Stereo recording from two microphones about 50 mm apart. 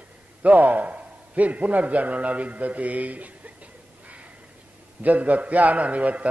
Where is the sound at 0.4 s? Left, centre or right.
Right.